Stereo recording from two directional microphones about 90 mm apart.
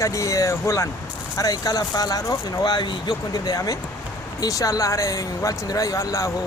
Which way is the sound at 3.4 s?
45° left (ahead or behind).